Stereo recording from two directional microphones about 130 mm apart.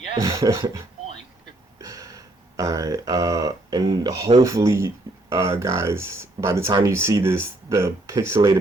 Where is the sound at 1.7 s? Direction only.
25° right (ahead or behind).